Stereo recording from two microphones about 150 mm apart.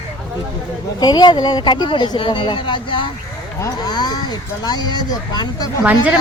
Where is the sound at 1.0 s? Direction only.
30° left (ahead or behind).